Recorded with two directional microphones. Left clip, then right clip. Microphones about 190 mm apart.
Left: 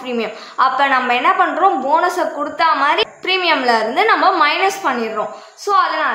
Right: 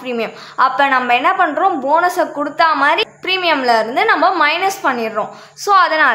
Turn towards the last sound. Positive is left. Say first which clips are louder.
# right 4 dB
turn(degrees=-30)  # may be behind; listen again after turning